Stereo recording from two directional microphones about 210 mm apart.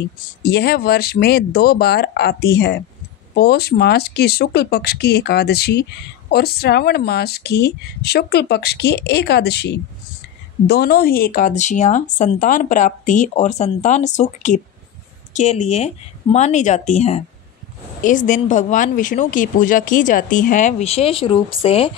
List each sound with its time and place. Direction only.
0.4 s speech: 50° left (ahead or behind); by 21.9 s 25° left (ahead or behind)